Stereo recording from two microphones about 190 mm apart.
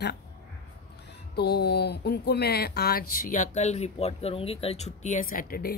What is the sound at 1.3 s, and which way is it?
Speech, 60° left (ahead or behind).